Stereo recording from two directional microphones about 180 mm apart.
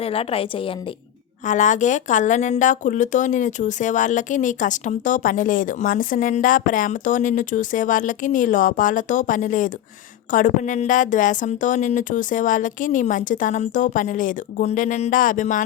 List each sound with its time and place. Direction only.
0.0 s a woman's voice: 30° left (ahead or behind)
1.5 s speech: 45° left (ahead or behind)